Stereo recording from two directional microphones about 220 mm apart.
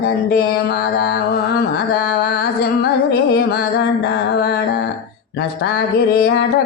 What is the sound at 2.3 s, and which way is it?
Music, 45° left (ahead or behind).